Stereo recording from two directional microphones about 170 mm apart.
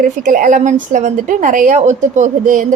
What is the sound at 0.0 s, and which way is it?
A woman's voice, 50° right (ahead or behind).